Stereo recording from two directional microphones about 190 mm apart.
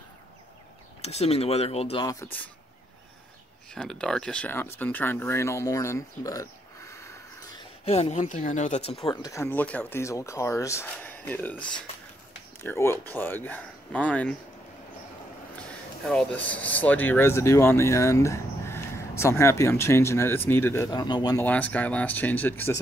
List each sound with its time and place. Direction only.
1.0 s speech: 35° left (ahead or behind)
3.7 s speech: 5° left (ahead or behind)
7.8 s speech: 35° left (ahead or behind)
9.1 s speech: 15° left (ahead or behind)
15.5 s a sound: 5° left (ahead or behind)
16.8 s speech: 10° left (ahead or behind)
21.5 s speech: 10° left (ahead or behind)